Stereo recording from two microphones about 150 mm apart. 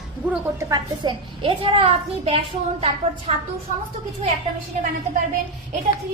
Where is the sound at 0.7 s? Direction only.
30° right (ahead or behind).